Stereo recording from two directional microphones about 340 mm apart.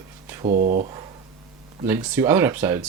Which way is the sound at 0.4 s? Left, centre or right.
Right.